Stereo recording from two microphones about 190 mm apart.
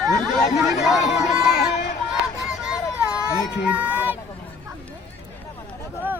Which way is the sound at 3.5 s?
5° right (ahead or behind).